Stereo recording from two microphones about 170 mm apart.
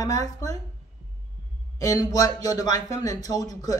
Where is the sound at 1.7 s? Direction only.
20° left (ahead or behind).